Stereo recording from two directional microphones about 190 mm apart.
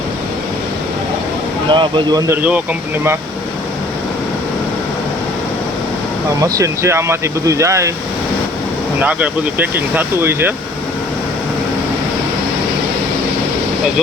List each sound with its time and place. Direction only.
1.7 s speech: 20° right (ahead or behind)
6.4 s speech: 15° right (ahead or behind)
9.0 s speech: 5° right (ahead or behind)